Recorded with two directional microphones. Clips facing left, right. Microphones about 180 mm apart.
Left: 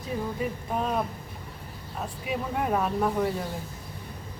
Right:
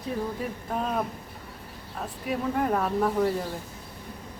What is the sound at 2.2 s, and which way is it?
Speech, 5° left (ahead or behind).